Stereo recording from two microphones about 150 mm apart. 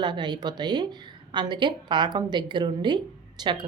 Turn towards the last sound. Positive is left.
turn(degrees=-30)  # may be behind; listen again after turning